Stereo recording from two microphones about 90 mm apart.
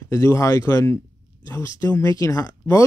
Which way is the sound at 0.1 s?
35° left (ahead or behind).